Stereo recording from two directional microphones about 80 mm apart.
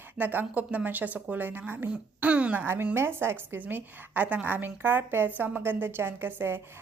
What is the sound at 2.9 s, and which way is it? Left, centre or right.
A woman's voice, right.